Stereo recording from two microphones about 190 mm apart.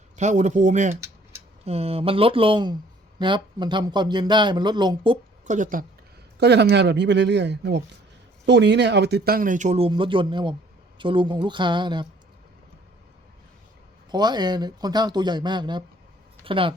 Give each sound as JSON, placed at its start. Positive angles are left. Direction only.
{"t": 0.2, "sound": "speech", "side_deg": -40}
{"t": 5.5, "sound": "speech", "side_deg": -45}
{"t": 6.4, "sound": "speech", "side_deg": -60}
{"t": 14.1, "sound": "speech", "side_deg": -20}